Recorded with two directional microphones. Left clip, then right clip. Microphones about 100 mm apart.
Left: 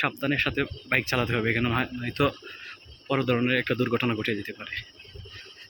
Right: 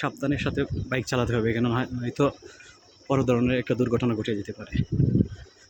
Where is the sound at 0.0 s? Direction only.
45° right (ahead or behind).